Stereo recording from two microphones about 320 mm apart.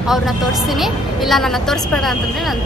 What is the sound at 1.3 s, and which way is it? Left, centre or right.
Speech, centre.